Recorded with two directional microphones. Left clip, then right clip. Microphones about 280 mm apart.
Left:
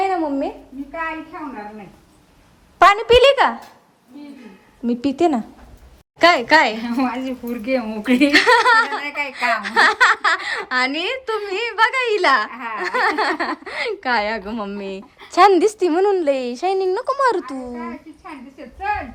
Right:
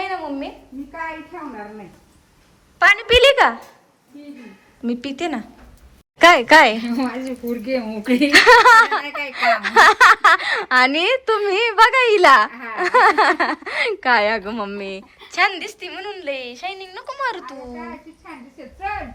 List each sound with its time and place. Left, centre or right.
0.1 s a sound: left
2.7 s a woman's voice: centre
4.9 s a woman's voice: centre
6.1 s speech: centre
7.2 s speech: left
8.3 s speech: centre